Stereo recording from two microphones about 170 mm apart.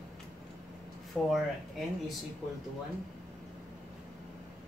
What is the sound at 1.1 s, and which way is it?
Speech, 5° left (ahead or behind).